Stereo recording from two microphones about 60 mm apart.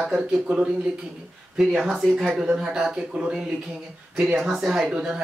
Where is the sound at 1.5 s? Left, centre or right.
Centre.